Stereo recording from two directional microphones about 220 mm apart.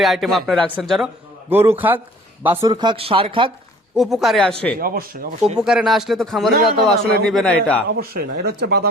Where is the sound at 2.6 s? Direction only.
20° right (ahead or behind).